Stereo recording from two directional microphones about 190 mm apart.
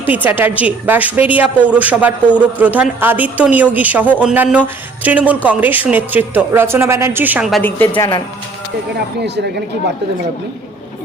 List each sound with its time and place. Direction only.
0.1 s speech: 10° right (ahead or behind)
7.9 s speech: 25° left (ahead or behind)
9.2 s speech: 65° right (ahead or behind)